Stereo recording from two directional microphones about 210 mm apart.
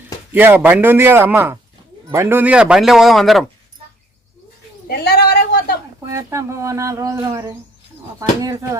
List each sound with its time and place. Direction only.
0.3 s a man's voice: 10° right (ahead or behind)
4.9 s a sound: 45° left (ahead or behind)
6.1 s speech: 15° right (ahead or behind)